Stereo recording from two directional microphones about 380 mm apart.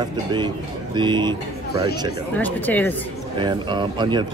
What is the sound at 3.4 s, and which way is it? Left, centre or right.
Speech, centre.